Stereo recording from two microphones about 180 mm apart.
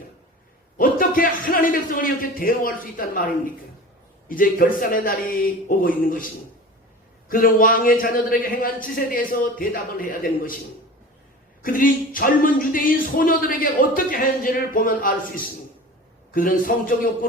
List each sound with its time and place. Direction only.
0.8 s speech: 50° left (ahead or behind)
4.3 s speech: 50° left (ahead or behind)
11.6 s speech: 50° left (ahead or behind)
16.3 s speech: 50° left (ahead or behind)